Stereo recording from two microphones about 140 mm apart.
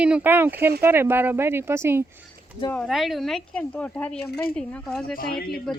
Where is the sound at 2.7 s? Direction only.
Centre (ahead or behind).